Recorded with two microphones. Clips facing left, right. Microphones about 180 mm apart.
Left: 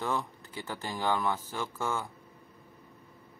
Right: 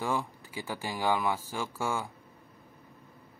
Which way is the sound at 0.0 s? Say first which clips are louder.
Right 1 dB; 10° right (ahead or behind).